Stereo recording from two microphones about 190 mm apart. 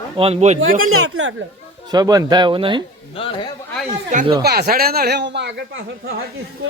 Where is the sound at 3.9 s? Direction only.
35° right (ahead or behind).